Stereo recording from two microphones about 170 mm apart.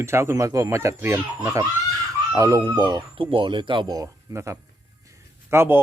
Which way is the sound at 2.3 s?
20° right (ahead or behind).